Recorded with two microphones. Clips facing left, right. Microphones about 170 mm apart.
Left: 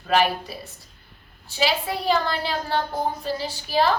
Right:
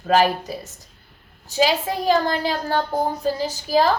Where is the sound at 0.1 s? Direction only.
40° right (ahead or behind).